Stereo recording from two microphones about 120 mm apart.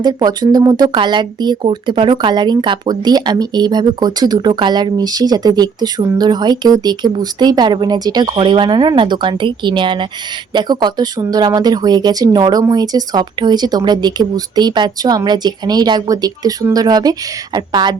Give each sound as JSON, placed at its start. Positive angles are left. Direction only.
{"t": 0.0, "sound": "speech", "side_deg": -35}